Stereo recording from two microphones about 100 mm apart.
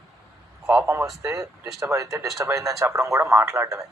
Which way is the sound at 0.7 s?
15° right (ahead or behind).